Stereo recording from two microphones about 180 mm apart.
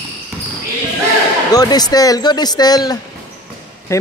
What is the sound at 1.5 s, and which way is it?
A man's voice, 20° left (ahead or behind).